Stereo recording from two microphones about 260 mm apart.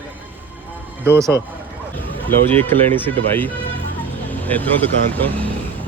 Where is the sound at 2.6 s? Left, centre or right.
Centre.